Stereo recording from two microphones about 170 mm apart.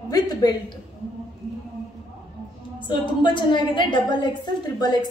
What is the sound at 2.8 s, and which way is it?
A woman's voice, 25° left (ahead or behind).